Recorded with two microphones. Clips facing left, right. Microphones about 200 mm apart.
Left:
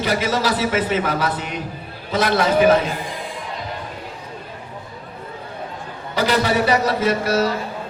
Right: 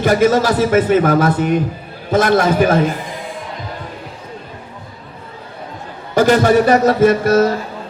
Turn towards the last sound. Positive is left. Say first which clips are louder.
# right 7 dB
turn(degrees=-50)  # may be behind; listen again after turning